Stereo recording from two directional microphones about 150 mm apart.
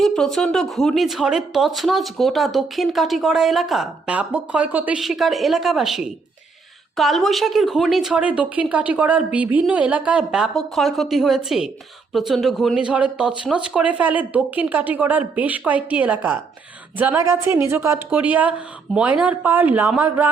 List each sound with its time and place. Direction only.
0.0 s speech: centre (ahead or behind)